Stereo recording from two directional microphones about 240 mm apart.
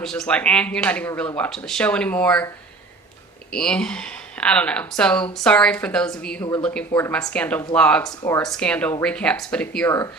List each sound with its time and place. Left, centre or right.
0.0 s speech: centre
3.5 s speech: centre
8.0 s speech: centre
8.5 s speech: centre